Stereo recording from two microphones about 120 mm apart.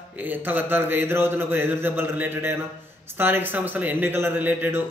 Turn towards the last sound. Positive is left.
turn(degrees=-15)  # may be behind; listen again after turning